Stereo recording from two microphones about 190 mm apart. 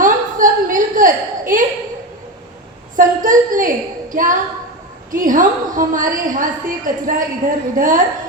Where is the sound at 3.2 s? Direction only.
45° right (ahead or behind).